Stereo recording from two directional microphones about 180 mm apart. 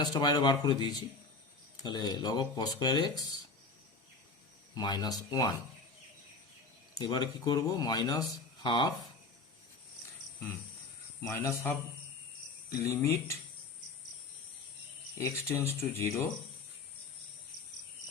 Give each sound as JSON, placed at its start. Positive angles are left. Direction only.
{"t": 0.0, "sound": "speech", "side_deg": 25}
{"t": 4.7, "sound": "speech", "side_deg": 25}
{"t": 7.0, "sound": "speech", "side_deg": 25}
{"t": 11.2, "sound": "speech", "side_deg": 15}
{"t": 15.2, "sound": "speech", "side_deg": 15}